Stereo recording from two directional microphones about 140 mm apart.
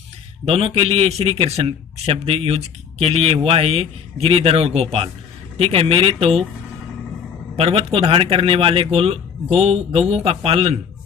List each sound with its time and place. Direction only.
0.4 s a man's voice: 40° right (ahead or behind)
7.5 s a man's voice: 45° right (ahead or behind)